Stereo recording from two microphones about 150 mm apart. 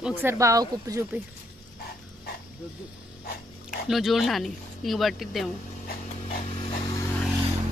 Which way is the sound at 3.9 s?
Centre (ahead or behind).